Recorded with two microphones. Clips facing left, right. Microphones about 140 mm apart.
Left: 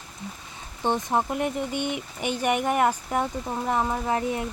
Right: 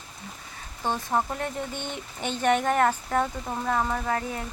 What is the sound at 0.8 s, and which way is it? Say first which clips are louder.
Speech: left 2 dB; 20° left (ahead or behind).